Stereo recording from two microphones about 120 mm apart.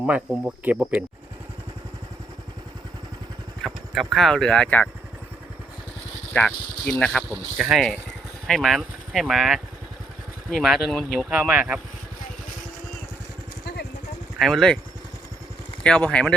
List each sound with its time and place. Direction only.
0.0 s speech: 5° right (ahead or behind)
3.6 s clip-clop: centre (ahead or behind)
4.1 s speech: centre (ahead or behind)
6.3 s speech: 5° left (ahead or behind)
7.3 s speech: 5° right (ahead or behind)
11.3 s speech: 10° right (ahead or behind)
14.3 s speech: 5° left (ahead or behind)
15.8 s speech: 10° left (ahead or behind)